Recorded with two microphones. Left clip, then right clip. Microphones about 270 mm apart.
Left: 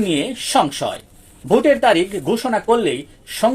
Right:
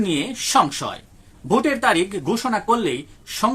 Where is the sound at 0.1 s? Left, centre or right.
Centre.